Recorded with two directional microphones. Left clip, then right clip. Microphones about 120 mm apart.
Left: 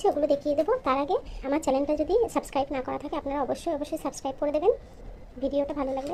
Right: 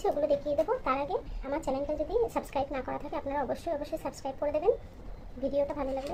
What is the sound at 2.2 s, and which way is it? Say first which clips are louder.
A woman's voice: left 4 dB; 45° left (ahead or behind).